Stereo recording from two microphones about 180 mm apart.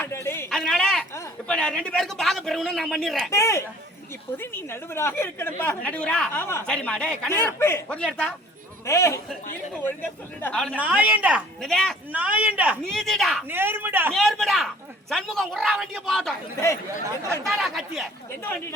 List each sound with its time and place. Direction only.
0.0 s a sound: 15° left (ahead or behind)
0.5 s a sound: centre (ahead or behind)
1.5 s a man's voice: 5° left (ahead or behind)
3.2 s speech: 15° left (ahead or behind)
8.9 s speech: 15° left (ahead or behind)
10.8 s a man's voice: 10° right (ahead or behind)
13.5 s a man's voice: 10° right (ahead or behind)
14.1 s a man's voice: centre (ahead or behind)
17.4 s a man's voice: centre (ahead or behind)